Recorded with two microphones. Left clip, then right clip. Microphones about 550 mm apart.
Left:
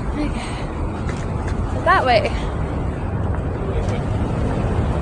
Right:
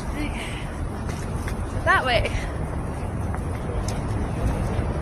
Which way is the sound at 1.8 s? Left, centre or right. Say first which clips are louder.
Left 5 dB; right.